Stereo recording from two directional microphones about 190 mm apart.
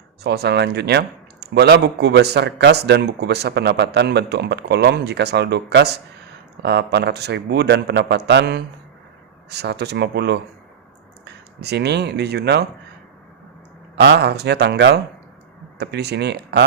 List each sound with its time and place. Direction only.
0.2 s speech: 60° right (ahead or behind)
11.6 s speech: 60° right (ahead or behind)
13.9 s speech: 60° right (ahead or behind)